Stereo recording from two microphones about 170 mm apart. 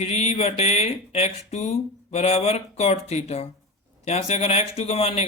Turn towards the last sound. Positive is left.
turn(degrees=35)  # may be behind; listen again after turning